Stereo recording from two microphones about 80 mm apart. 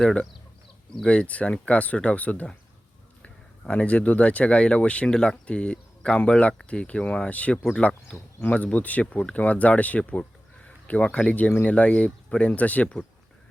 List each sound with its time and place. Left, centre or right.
0.0 s speech: centre